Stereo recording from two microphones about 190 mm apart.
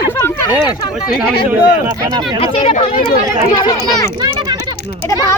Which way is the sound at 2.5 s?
30° left (ahead or behind).